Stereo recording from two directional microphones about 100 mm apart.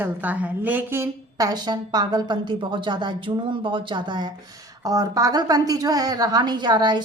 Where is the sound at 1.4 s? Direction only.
40° right (ahead or behind).